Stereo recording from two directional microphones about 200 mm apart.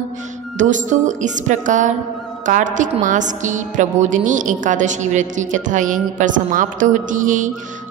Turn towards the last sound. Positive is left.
turn(degrees=-40)  # may be behind; listen again after turning